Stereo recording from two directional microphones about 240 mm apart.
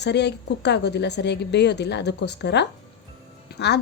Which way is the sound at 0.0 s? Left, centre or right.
Left.